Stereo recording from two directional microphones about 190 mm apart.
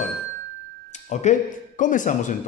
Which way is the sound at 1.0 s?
35° left (ahead or behind).